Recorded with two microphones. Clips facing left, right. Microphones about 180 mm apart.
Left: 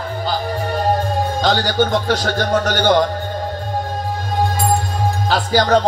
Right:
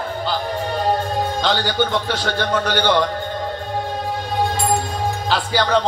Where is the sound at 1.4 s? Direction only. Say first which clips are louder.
Left 4 dB; 45° left (ahead or behind).